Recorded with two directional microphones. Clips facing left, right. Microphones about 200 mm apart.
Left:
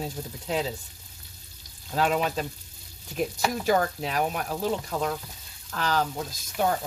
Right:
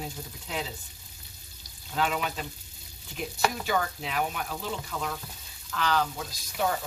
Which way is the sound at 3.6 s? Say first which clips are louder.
Left 5 dB; 40° left (ahead or behind).